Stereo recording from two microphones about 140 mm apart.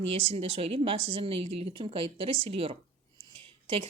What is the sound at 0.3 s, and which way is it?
Speech, 40° right (ahead or behind).